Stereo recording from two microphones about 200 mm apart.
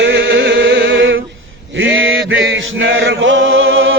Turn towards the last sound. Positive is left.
turn(degrees=-75)  # may be behind; listen again after turning